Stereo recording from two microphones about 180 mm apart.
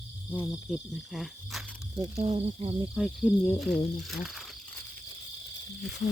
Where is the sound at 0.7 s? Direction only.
Centre (ahead or behind).